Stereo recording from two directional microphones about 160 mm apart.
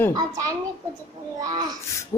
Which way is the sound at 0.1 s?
25° right (ahead or behind).